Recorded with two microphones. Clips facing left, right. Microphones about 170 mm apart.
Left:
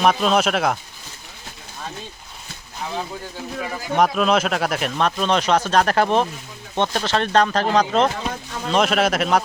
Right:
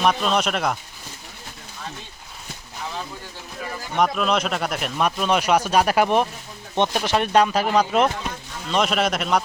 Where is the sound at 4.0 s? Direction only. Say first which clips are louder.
Left 3 dB; centre (ahead or behind).